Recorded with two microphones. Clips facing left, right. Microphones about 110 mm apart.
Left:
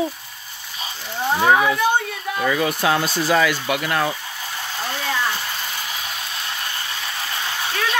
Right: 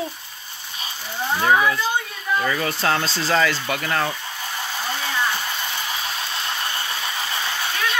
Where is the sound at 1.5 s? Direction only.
65° left (ahead or behind).